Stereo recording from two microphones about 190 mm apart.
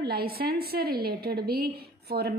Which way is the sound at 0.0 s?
55° right (ahead or behind).